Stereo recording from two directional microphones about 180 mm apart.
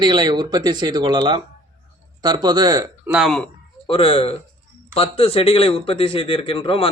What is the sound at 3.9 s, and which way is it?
Speech, 30° left (ahead or behind).